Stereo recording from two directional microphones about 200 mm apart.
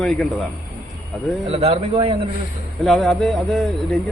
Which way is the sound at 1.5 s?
30° right (ahead or behind).